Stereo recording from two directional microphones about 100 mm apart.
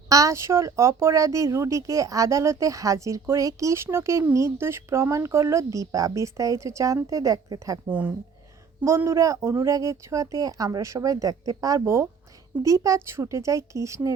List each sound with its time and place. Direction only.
0.1 s speech: 35° right (ahead or behind)
7.9 s speech: 15° right (ahead or behind)
9.0 s speech: 30° right (ahead or behind)